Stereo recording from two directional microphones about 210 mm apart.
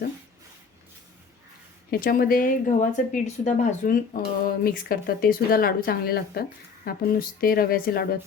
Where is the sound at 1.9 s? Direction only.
45° left (ahead or behind).